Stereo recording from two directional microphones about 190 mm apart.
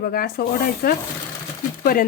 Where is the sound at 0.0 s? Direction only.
50° left (ahead or behind).